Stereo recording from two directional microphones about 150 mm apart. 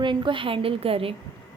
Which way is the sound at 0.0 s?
30° right (ahead or behind).